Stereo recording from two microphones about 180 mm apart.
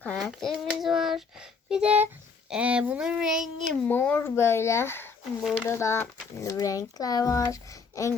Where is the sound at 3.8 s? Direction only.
10° left (ahead or behind).